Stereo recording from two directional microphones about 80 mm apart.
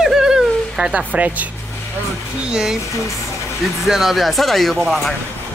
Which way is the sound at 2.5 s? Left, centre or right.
Centre.